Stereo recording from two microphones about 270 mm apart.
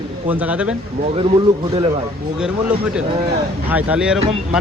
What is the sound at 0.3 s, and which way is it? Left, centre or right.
Speech, centre.